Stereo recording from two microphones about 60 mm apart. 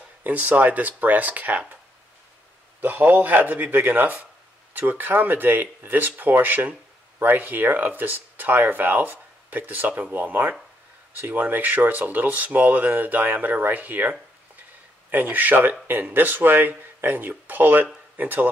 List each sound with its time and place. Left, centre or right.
0.2 s speech: right
2.8 s speech: right